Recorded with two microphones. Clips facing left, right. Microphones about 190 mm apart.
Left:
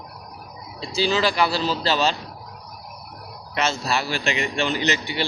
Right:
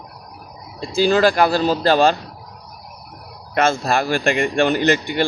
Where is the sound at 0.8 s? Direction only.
50° right (ahead or behind).